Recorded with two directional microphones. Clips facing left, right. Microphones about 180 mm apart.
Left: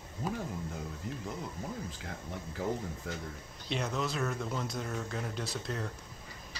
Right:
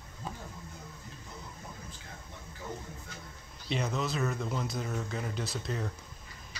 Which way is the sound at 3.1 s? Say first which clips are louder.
Left 9 dB; 90° left.